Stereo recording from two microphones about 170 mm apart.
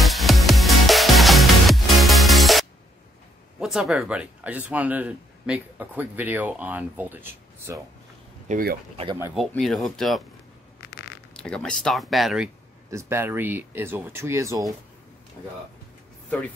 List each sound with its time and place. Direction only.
0.0 s music: centre (ahead or behind)
3.5 s speech: centre (ahead or behind)
8.5 s speech: 55° right (ahead or behind)
8.9 s speech: 30° right (ahead or behind)
9.5 s speech: 5° left (ahead or behind)
11.3 s speech: 5° left (ahead or behind)
12.9 s speech: 15° right (ahead or behind)